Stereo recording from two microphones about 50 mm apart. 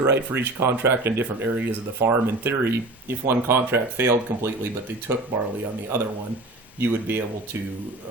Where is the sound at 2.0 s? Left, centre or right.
Right.